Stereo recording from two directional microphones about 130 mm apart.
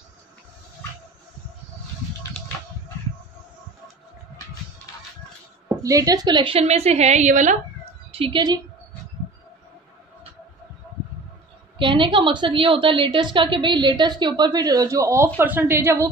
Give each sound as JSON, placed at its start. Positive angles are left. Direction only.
{"t": 5.8, "sound": "a woman's voice", "side_deg": -25}
{"t": 8.1, "sound": "a woman's voice", "side_deg": -40}
{"t": 11.8, "sound": "a woman's voice", "side_deg": -40}